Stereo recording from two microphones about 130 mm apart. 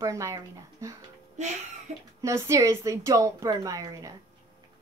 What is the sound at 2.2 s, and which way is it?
Speech, 25° right (ahead or behind).